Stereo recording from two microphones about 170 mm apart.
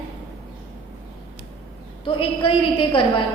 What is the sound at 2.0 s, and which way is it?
A woman's voice, 30° left (ahead or behind).